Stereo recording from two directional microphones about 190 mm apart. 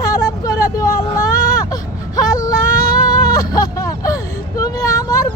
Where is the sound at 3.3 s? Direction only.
20° left (ahead or behind).